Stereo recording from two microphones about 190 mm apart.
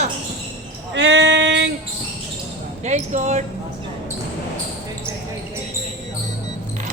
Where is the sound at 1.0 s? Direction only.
70° right (ahead or behind).